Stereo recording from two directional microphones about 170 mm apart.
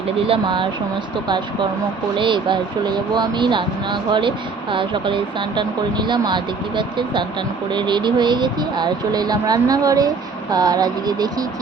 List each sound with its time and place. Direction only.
0.3 s speech: 30° right (ahead or behind)
2.1 s speech: 30° right (ahead or behind)